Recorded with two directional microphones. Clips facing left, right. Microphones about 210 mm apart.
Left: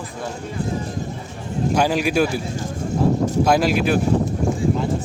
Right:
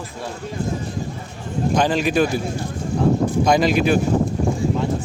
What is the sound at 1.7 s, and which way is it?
Speech, 10° left (ahead or behind).